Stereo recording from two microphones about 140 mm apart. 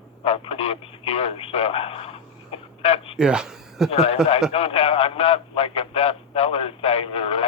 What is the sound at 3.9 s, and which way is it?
Speech, 45° left (ahead or behind).